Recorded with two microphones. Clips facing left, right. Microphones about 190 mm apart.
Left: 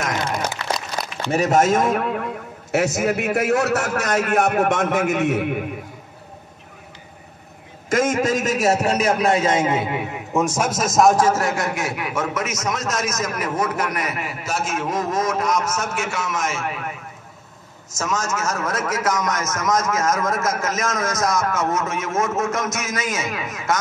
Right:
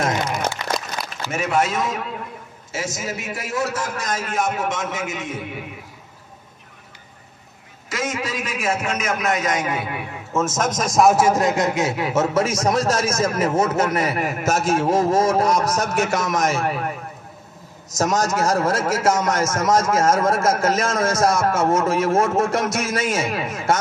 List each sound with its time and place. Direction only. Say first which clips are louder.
0.6 s a sound: right 1 dB; 15° right (ahead or behind)
1.3 s a man's voice: left 5 dB; 40° left (ahead or behind); by 5.7 s 60° left (ahead or behind)
7.9 s a man's voice: left 7 dB; 50° left (ahead or behind); by 14.2 s 30° right (ahead or behind)
14.2 s a man's voice: right 6 dB; 45° right (ahead or behind)
17.9 s a man's voice: right 5 dB; 35° right (ahead or behind)